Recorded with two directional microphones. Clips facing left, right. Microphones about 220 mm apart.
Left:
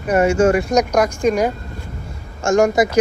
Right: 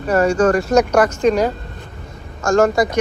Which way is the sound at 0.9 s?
10° left (ahead or behind).